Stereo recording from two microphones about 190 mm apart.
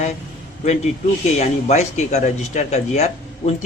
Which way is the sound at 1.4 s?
40° left (ahead or behind).